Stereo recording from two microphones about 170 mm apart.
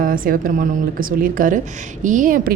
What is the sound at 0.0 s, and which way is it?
A woman's voice, 55° right (ahead or behind).